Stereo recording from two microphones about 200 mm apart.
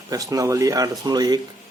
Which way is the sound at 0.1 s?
15° right (ahead or behind).